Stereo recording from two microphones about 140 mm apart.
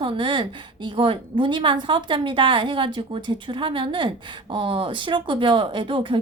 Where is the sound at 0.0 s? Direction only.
35° right (ahead or behind).